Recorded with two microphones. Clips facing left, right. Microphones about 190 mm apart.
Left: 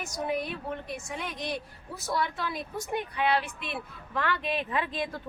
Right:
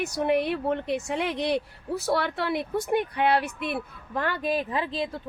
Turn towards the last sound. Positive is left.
turn(degrees=-30)  # may be behind; listen again after turning